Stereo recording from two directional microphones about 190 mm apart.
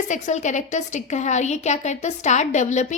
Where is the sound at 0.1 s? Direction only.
40° left (ahead or behind).